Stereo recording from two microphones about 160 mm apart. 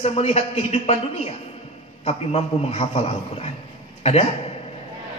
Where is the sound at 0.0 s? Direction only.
40° left (ahead or behind).